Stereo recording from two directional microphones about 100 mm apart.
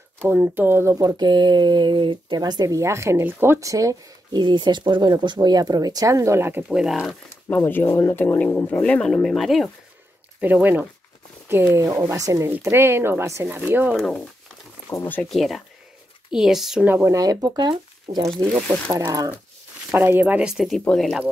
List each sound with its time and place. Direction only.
0.2 s speech: 25° right (ahead or behind)
0.9 s speech: 40° right (ahead or behind); by 6.6 s 25° right (ahead or behind)
6.7 s speech: 5° right (ahead or behind)
7.4 s speech: 20° left (ahead or behind); by 9.7 s centre (ahead or behind)
10.4 s speech: 15° right (ahead or behind)
13.9 s speech: 5° left (ahead or behind)
15.0 s speech: 20° left (ahead or behind)
15.2 s speech: centre (ahead or behind)
16.8 s speech: 20° right (ahead or behind)
17.1 s speech: 35° right (ahead or behind)
19.9 s speech: 20° right (ahead or behind); by 21.2 s 10° left (ahead or behind)